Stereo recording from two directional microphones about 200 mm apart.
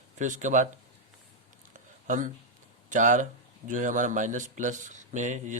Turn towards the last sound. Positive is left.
turn(degrees=-40)  # may be behind; listen again after turning